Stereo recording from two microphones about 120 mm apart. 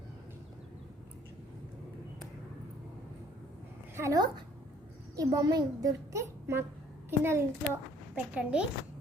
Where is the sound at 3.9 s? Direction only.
20° right (ahead or behind).